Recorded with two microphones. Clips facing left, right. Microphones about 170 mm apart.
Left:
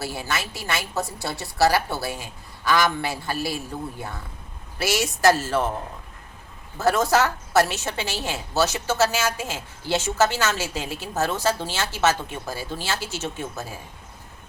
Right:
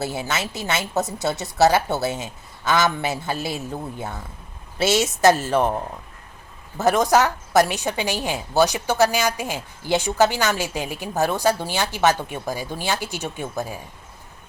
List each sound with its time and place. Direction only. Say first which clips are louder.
0.0 s a woman's voice: right 3 dB; 20° right (ahead or behind)
6.7 s a woman's voice: right 2 dB; 15° right (ahead or behind)